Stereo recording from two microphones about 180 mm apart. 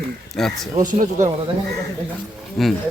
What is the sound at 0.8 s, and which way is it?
Speech, 45° right (ahead or behind).